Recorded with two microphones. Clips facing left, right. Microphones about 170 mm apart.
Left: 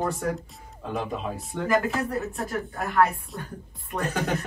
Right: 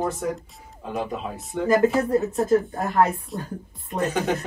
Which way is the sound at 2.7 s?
35° right (ahead or behind).